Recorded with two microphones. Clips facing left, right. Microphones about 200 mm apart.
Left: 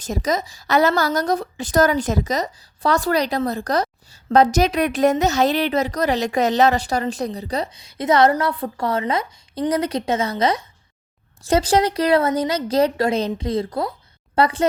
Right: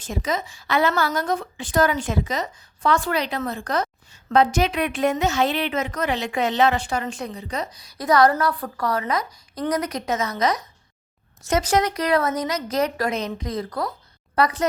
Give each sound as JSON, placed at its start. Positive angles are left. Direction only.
{"t": 0.0, "sound": "a woman's voice", "side_deg": 40}